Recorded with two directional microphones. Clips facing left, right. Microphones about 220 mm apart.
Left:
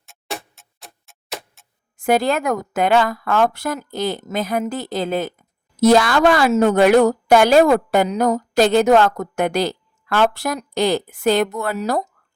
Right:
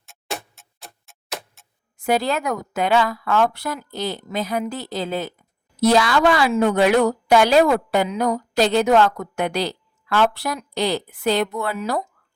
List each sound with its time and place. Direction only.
0.0 s tick-tock: centre (ahead or behind)
2.0 s speech: 50° left (ahead or behind)